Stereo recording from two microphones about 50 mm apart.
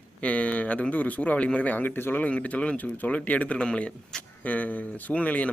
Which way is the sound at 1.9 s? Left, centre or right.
Left.